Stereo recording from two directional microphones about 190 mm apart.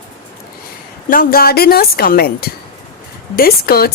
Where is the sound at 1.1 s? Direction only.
50° left (ahead or behind).